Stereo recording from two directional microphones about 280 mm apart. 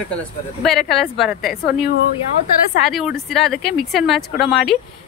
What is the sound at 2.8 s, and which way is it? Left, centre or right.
A woman's voice, centre.